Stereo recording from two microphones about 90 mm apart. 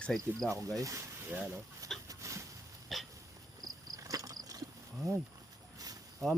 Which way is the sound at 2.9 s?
Centre (ahead or behind).